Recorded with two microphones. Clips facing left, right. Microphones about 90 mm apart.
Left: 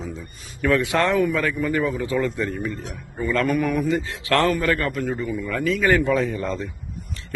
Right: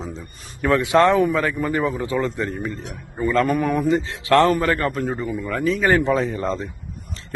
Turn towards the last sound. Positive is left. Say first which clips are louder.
# right 1 dB
turn(degrees=-30)  # may be behind; listen again after turning